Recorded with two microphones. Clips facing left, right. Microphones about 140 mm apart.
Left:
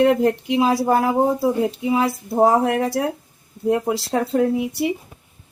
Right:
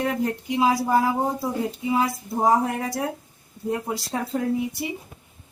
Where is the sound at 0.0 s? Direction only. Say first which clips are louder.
Left 9 dB; 65° left (ahead or behind); by 3.0 s 90° left.